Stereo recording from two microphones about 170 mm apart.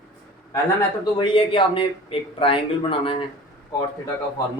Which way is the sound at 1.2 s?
30° left (ahead or behind).